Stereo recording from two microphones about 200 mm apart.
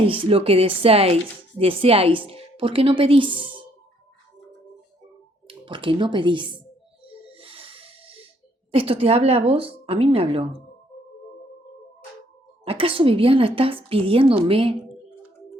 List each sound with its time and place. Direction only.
0.1 s speech: 30° right (ahead or behind)
5.5 s speech: 25° right (ahead or behind)
7.0 s music: 30° right (ahead or behind)
8.7 s speech: 30° right (ahead or behind)
12.6 s speech: 25° right (ahead or behind)